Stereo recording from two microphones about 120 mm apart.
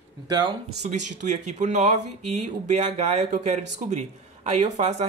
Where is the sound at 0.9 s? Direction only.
85° right.